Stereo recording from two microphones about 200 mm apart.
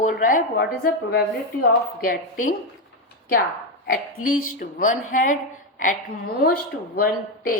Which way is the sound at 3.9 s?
45° left (ahead or behind).